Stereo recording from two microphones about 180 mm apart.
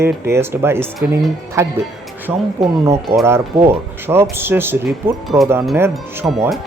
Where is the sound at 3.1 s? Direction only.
15° right (ahead or behind).